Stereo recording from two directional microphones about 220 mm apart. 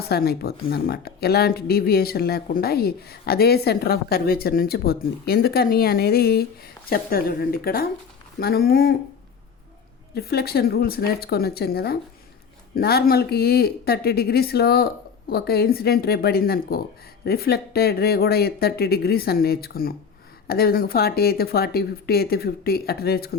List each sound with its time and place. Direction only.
0.1 s speech: 45° left (ahead or behind)
10.2 s speech: 45° left (ahead or behind)